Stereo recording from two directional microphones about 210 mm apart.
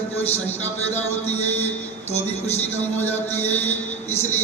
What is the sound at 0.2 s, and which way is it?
Speech, 10° left (ahead or behind).